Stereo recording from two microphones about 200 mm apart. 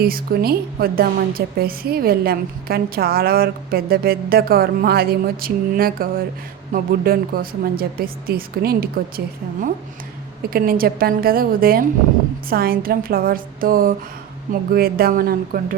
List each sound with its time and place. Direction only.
0.0 s a woman's voice: 50° right (ahead or behind)